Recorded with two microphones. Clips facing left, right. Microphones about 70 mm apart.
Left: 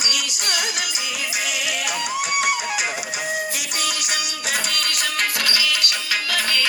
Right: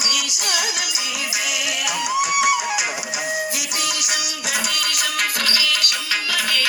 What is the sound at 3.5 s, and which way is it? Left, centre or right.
Music, left.